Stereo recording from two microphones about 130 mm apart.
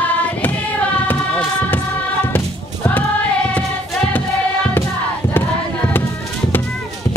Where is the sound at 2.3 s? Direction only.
20° left (ahead or behind).